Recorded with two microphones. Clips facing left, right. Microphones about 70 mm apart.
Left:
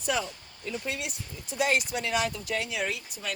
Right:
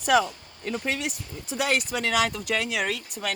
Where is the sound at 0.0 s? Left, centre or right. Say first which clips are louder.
Right 8 dB; right.